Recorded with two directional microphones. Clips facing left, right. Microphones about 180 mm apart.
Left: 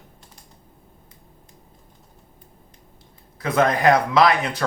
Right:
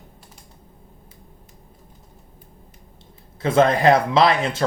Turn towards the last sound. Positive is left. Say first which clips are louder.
# even
turn(degrees=-25)  # may be behind; listen again after turning